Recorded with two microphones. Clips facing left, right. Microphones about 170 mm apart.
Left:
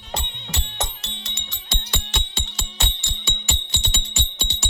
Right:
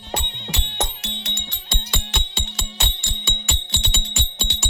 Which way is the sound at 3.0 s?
55° right (ahead or behind).